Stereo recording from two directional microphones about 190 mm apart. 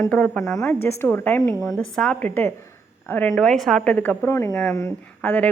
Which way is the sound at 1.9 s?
5° left (ahead or behind).